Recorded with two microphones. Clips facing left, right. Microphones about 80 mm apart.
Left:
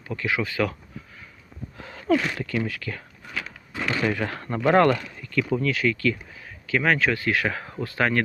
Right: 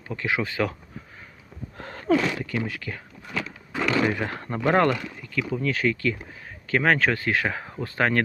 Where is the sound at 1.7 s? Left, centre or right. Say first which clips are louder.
Right 3 dB; right.